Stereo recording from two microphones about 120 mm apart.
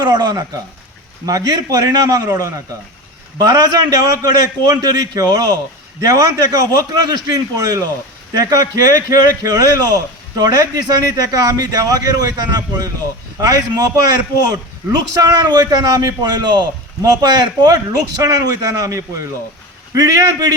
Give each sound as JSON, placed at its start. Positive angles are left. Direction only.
{"t": 0.0, "sound": "speech", "side_deg": -35}
{"t": 15.1, "sound": "a man's voice", "side_deg": -30}